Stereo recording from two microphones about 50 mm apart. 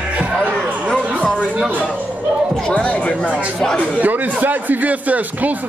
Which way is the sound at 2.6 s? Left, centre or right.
Centre.